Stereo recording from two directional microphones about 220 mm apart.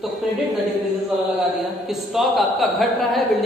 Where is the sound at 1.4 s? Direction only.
Centre (ahead or behind).